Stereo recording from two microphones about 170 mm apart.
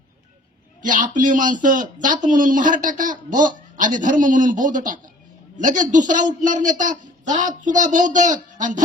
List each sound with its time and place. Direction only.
0.8 s a man's voice: 50° right (ahead or behind)